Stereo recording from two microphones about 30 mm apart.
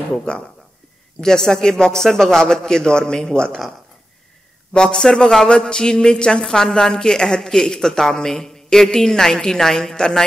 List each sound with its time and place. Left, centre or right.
0.1 s speech: left
4.7 s a woman's voice: centre
5.7 s a woman's voice: left